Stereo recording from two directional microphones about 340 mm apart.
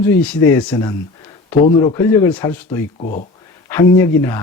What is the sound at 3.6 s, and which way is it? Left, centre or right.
Speech, centre.